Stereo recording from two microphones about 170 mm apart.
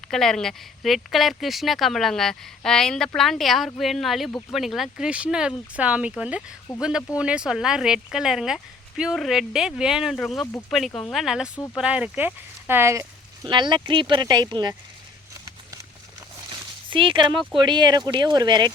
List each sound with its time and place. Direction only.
0.1 s speech: 5° left (ahead or behind)
6.7 s speech: 20° left (ahead or behind)
7.2 s speech: 5° right (ahead or behind); by 14.8 s 25° right (ahead or behind)
16.9 s speech: 30° right (ahead or behind)